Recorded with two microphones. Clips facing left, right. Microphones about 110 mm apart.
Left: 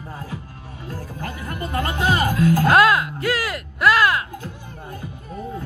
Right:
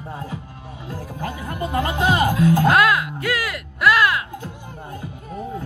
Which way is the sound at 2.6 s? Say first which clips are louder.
Left 1 dB; 35° left (ahead or behind).